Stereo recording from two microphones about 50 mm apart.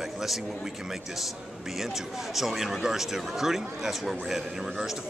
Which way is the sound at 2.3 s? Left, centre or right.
Centre.